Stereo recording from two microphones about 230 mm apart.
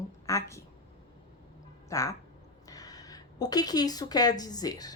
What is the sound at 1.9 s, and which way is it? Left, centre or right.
Speech, centre.